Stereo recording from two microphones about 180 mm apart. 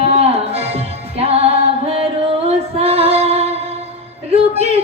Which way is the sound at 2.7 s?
35° right (ahead or behind).